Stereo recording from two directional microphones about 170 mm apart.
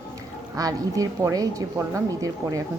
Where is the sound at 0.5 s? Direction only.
20° right (ahead or behind).